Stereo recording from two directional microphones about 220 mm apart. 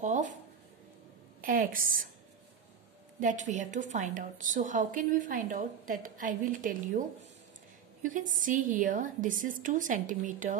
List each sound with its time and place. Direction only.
0.0 s a sound: 35° right (ahead or behind)
1.4 s a woman's voice: 40° right (ahead or behind)
3.2 s a woman's voice: 35° right (ahead or behind)